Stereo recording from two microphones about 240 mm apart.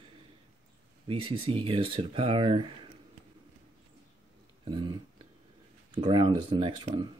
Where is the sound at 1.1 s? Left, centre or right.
Right.